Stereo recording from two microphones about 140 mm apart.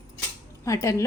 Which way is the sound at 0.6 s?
20° left (ahead or behind).